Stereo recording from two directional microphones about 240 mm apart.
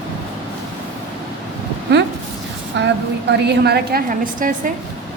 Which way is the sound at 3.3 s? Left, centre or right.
Right.